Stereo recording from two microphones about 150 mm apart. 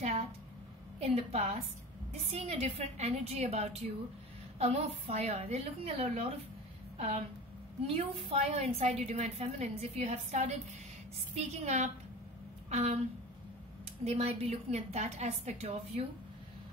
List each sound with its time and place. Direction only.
0.9 s a woman's voice: 45° right (ahead or behind)
14.0 s a woman's voice: 45° right (ahead or behind)